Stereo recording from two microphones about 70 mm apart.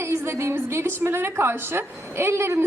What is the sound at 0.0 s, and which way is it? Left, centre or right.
A woman's voice, right.